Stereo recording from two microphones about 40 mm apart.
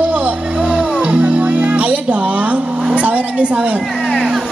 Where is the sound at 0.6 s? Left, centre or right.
Right.